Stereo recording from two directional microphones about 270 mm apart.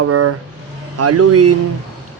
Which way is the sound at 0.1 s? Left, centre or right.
Right.